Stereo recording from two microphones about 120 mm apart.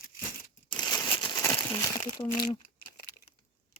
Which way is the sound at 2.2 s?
35° left (ahead or behind).